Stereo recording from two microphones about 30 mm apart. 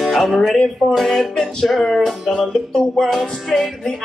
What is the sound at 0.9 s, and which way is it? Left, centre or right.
Music, centre.